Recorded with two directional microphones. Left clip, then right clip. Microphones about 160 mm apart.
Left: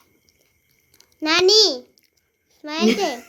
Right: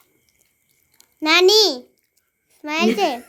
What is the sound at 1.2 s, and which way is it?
A child's voice, 40° right (ahead or behind).